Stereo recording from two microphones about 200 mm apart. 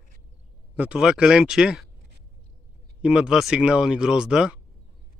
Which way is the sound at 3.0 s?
5° right (ahead or behind).